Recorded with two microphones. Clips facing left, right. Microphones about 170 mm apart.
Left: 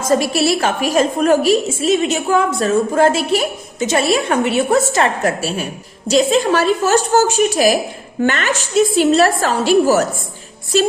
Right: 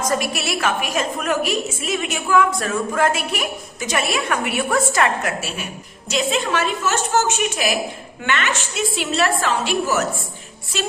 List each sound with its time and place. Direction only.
0.0 s a woman's voice: 30° left (ahead or behind)